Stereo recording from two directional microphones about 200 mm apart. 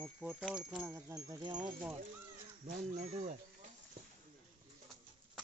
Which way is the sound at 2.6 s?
40° right (ahead or behind).